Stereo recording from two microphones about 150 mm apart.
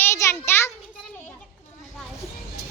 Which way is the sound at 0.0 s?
20° left (ahead or behind).